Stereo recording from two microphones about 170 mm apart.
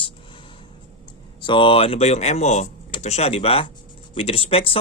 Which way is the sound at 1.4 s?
30° left (ahead or behind).